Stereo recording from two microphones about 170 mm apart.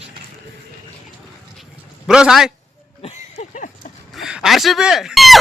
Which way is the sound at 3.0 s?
35° left (ahead or behind).